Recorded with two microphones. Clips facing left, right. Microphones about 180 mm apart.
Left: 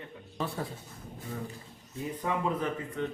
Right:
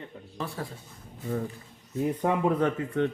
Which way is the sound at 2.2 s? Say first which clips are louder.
Right 5 dB; 65° right (ahead or behind).